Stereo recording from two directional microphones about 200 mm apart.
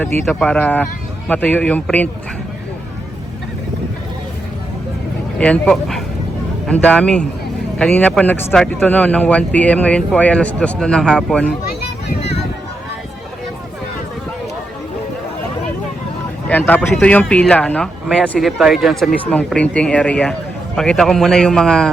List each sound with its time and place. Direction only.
0.0 s speech: 5° left (ahead or behind)
5.4 s speech: 5° left (ahead or behind)
16.5 s speech: 10° left (ahead or behind)